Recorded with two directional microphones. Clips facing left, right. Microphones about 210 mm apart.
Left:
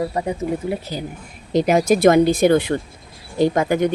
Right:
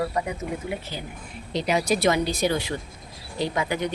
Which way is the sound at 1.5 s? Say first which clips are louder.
Left 8 dB; 50° left (ahead or behind).